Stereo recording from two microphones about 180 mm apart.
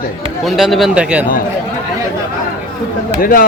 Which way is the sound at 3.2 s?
50° left (ahead or behind).